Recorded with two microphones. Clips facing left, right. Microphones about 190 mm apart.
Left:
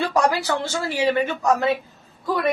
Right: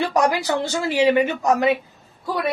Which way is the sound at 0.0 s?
15° right (ahead or behind).